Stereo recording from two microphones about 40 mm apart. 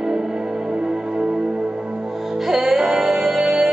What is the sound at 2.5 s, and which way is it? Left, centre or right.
Music, centre.